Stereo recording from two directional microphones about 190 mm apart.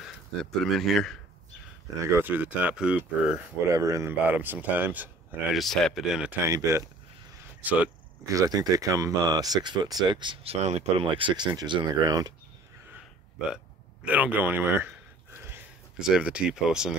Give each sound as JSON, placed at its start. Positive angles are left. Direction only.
{"t": 0.0, "sound": "speech", "side_deg": 0}
{"t": 2.1, "sound": "speech", "side_deg": -10}
{"t": 6.4, "sound": "speech", "side_deg": -15}
{"t": 14.0, "sound": "speech", "side_deg": -10}